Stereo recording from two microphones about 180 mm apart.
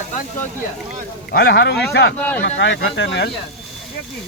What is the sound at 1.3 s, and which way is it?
Speech, 65° left (ahead or behind).